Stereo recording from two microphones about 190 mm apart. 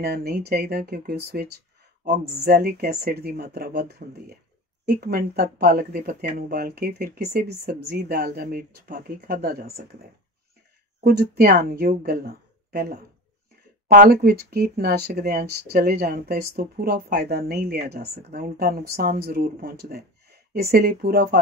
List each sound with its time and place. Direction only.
0.0 s speech: 55° right (ahead or behind)
11.1 s speech: 55° right (ahead or behind)